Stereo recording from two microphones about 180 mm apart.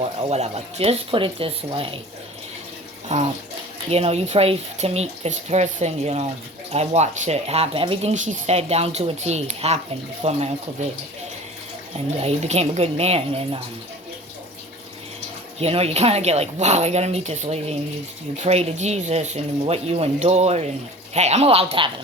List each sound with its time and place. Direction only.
0.0 s speech: 35° right (ahead or behind)
3.1 s speech: 40° right (ahead or behind)
11.9 s speech: 35° right (ahead or behind)
15.5 s speech: 35° right (ahead or behind)